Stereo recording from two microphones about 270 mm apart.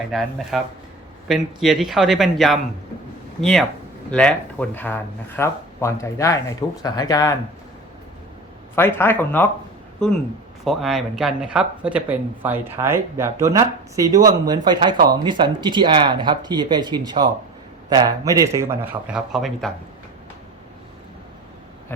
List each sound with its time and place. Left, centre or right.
0.1 s speech: centre
8.7 s speech: centre
10.6 s speech: centre